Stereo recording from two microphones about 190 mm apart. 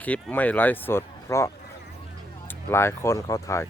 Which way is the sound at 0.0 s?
10° left (ahead or behind).